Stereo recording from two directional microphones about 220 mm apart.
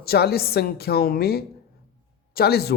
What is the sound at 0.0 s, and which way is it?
A woman's voice, 45° left (ahead or behind).